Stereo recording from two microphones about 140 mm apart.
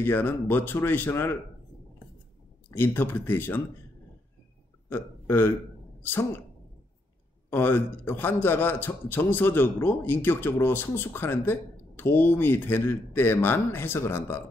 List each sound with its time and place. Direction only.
0.0 s a man's voice: 15° left (ahead or behind)
2.7 s a man's voice: 15° left (ahead or behind)
4.8 s speech: 15° left (ahead or behind)
7.4 s a man's voice: 15° left (ahead or behind)